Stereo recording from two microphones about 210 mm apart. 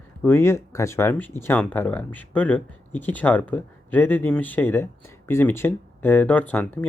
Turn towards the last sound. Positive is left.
turn(degrees=10)  # may be behind; listen again after turning